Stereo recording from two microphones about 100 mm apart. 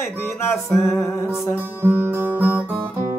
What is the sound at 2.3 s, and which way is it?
Guitar, 15° right (ahead or behind).